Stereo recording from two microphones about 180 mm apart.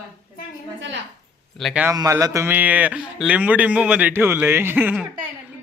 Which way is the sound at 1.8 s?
15° right (ahead or behind).